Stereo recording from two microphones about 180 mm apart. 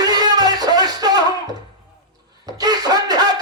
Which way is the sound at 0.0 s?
20° right (ahead or behind).